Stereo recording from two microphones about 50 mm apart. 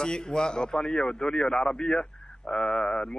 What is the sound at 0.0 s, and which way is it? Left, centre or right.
A man's voice, centre.